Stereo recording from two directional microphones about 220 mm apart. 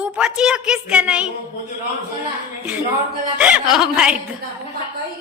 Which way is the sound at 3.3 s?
5° right (ahead or behind).